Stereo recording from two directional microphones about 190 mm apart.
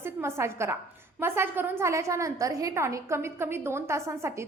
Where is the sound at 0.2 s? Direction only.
15° right (ahead or behind).